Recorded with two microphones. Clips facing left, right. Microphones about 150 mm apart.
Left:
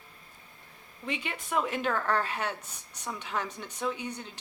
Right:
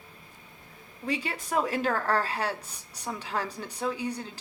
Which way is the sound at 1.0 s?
35° right (ahead or behind).